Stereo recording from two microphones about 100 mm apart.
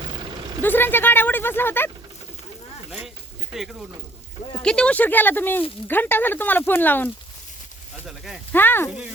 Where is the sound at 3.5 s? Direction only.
5° right (ahead or behind).